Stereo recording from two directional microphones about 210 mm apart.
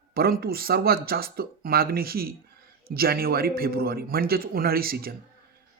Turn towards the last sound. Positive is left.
turn(degrees=-45)  # may be behind; listen again after turning